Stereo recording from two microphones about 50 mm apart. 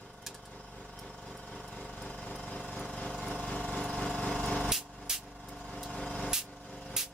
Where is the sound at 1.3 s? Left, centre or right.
Centre.